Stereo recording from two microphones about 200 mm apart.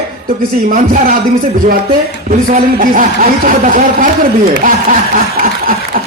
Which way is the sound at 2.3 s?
40° right (ahead or behind).